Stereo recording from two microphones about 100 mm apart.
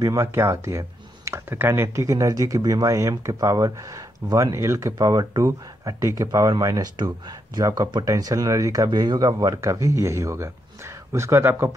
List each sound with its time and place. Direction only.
0.0 s speech: 35° right (ahead or behind)
4.9 s speech: 40° right (ahead or behind)